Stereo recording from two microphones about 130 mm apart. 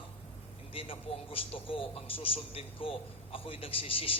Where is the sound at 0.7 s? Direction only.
45° left (ahead or behind).